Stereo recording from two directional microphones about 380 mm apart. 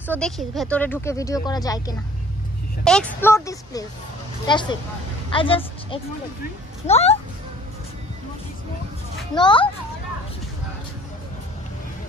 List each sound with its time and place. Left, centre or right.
0.0 s a woman's voice: centre
9.3 s speech: centre